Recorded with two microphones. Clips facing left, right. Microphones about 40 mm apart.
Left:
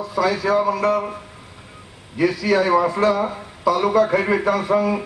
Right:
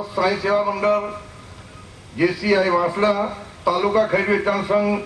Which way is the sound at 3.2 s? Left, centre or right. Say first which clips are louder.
Left 1 dB; centre.